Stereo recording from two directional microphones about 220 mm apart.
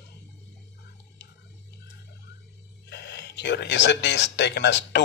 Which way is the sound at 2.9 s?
50° left (ahead or behind).